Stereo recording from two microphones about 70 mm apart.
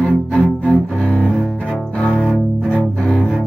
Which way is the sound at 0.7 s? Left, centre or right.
Centre.